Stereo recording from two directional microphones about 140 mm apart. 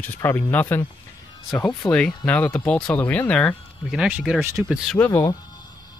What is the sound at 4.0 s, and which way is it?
Speech, 5° right (ahead or behind).